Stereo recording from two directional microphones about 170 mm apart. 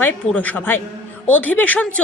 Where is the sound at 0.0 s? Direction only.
10° left (ahead or behind).